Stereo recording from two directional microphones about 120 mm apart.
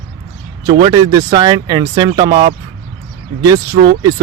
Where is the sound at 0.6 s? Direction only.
35° right (ahead or behind).